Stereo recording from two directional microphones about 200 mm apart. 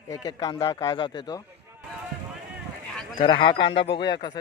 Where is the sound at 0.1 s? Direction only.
20° left (ahead or behind).